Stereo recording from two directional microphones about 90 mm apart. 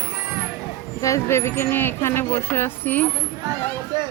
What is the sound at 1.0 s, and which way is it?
Speech, 35° left (ahead or behind).